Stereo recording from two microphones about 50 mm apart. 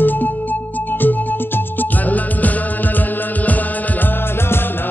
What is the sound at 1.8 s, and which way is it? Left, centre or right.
Music, left.